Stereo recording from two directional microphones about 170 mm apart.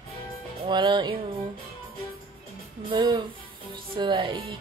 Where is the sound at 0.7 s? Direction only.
25° right (ahead or behind).